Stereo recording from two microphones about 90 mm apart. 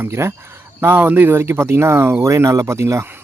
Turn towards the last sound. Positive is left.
turn(degrees=-35)  # may be behind; listen again after turning